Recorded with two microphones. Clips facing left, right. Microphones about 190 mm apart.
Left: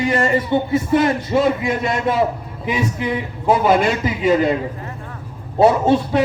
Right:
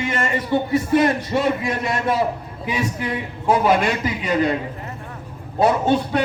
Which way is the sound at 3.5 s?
Centre (ahead or behind).